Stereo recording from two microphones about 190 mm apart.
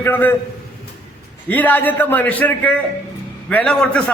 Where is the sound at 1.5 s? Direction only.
10° left (ahead or behind).